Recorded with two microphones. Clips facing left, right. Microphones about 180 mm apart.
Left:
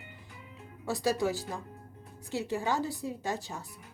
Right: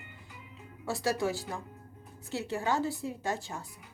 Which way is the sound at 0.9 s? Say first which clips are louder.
Left 1 dB; 20° left (ahead or behind).